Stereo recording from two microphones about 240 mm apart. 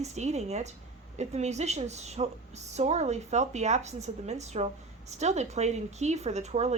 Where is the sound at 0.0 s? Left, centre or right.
Right.